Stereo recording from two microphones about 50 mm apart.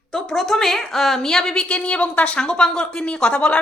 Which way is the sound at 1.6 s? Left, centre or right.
Left.